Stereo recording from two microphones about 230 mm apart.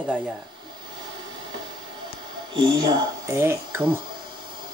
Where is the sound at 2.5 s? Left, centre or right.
Centre.